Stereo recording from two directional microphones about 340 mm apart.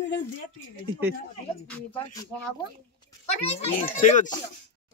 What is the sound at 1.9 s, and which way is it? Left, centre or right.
Music, centre.